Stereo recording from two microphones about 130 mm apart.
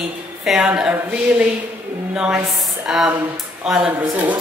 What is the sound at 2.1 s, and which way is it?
Speech, 10° right (ahead or behind).